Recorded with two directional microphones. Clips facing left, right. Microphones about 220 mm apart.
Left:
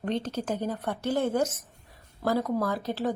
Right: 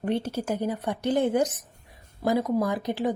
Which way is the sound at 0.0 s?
10° right (ahead or behind).